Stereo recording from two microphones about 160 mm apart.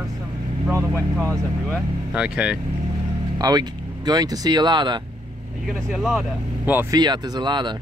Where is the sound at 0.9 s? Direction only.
10° left (ahead or behind).